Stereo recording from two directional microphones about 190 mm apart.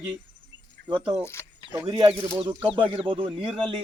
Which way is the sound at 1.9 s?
25° right (ahead or behind).